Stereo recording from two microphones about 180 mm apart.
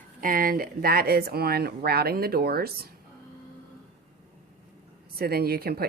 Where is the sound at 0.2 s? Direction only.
50° right (ahead or behind).